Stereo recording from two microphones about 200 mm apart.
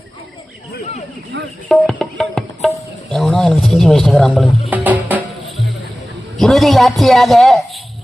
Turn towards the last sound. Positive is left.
turn(degrees=0)  # may be behind; listen again after turning